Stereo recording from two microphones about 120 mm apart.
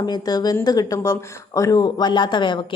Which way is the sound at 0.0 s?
35° left (ahead or behind).